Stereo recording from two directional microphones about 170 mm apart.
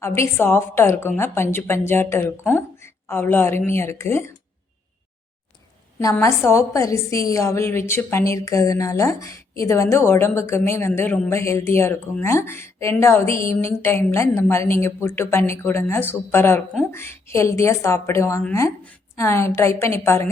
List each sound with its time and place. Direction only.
0.0 s a woman's voice: 15° left (ahead or behind)
6.0 s a woman's voice: 20° left (ahead or behind)